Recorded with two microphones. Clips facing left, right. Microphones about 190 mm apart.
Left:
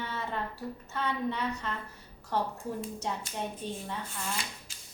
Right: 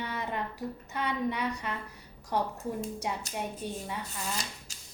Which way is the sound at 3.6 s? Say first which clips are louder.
Right 1 dB; 10° right (ahead or behind).